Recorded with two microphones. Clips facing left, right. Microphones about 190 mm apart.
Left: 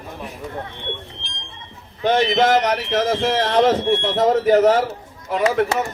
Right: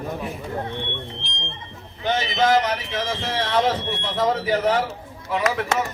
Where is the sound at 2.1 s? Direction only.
65° left (ahead or behind).